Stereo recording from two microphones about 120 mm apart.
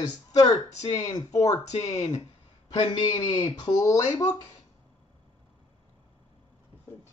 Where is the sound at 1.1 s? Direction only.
30° left (ahead or behind).